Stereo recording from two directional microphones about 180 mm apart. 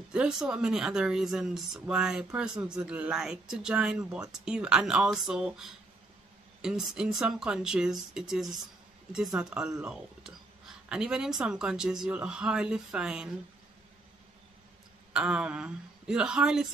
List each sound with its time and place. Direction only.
0.1 s speech: 5° right (ahead or behind)
15.1 s speech: 5° right (ahead or behind)